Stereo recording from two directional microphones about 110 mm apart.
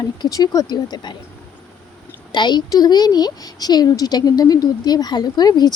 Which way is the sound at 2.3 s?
40° left (ahead or behind).